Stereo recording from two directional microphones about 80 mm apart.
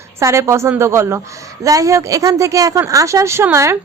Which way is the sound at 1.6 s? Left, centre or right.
Right.